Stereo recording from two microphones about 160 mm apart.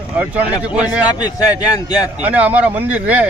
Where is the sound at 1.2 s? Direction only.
20° left (ahead or behind).